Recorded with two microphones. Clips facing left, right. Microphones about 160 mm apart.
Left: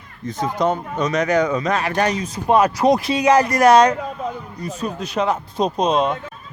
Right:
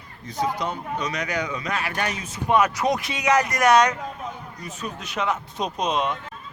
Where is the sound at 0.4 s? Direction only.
45° left (ahead or behind).